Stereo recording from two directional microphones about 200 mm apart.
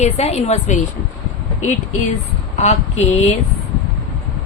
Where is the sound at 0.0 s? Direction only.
30° left (ahead or behind).